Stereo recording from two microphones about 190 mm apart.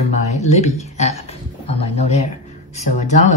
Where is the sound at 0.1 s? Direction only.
35° left (ahead or behind).